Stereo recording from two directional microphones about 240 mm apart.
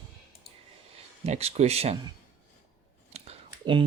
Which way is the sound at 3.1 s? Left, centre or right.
Right.